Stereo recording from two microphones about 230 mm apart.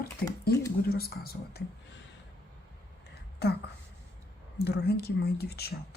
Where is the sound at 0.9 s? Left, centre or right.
Left.